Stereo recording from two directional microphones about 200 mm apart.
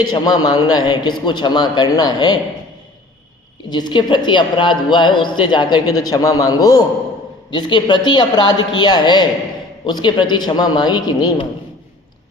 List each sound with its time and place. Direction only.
0.0 s a woman's voice: 20° left (ahead or behind)
3.7 s a woman's voice: 20° left (ahead or behind)